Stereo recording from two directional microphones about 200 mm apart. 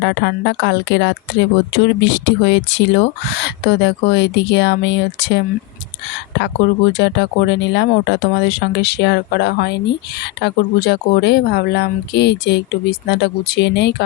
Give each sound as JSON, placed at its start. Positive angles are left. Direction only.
{"t": 0.0, "sound": "speech", "side_deg": 60}
{"t": 6.9, "sound": "speech", "side_deg": 60}